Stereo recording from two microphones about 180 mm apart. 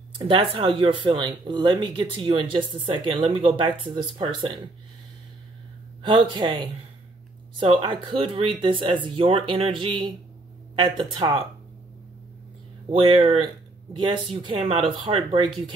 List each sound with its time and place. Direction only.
0.1 s speech: 25° right (ahead or behind)
6.0 s speech: 25° right (ahead or behind)
12.9 s speech: 30° right (ahead or behind)